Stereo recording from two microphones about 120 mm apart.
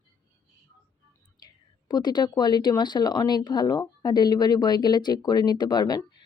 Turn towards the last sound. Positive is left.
turn(degrees=35)  # may be behind; listen again after turning